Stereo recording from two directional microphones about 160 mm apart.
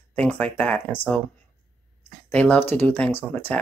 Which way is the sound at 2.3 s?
10° left (ahead or behind).